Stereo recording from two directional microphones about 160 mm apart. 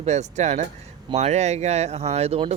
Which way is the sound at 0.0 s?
45° right (ahead or behind).